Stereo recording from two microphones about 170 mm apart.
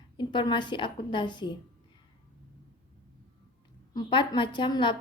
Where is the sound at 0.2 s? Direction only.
25° left (ahead or behind).